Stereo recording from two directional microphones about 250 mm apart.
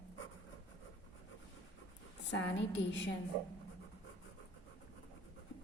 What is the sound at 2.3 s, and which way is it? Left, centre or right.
Speech, left.